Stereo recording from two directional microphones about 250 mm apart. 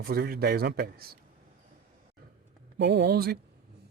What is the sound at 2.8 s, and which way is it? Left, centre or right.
Speech, right.